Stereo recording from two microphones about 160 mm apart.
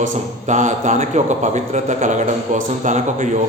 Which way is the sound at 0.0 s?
50° right (ahead or behind).